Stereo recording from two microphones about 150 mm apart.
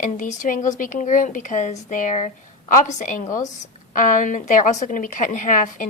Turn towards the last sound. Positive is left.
turn(degrees=60)  # may be behind; listen again after turning